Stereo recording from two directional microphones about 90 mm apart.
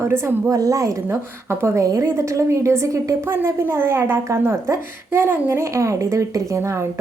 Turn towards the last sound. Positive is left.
turn(degrees=-30)  # may be behind; listen again after turning